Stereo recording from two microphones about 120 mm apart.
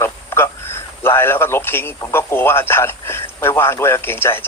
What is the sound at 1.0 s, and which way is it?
A man's voice, 20° left (ahead or behind).